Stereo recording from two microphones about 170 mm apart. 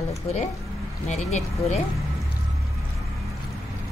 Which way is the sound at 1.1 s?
40° left (ahead or behind).